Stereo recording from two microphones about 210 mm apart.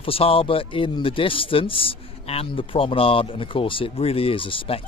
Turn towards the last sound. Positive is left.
turn(degrees=25)  # may be behind; listen again after turning